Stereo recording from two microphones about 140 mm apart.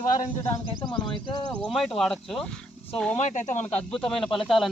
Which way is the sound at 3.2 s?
55° left (ahead or behind).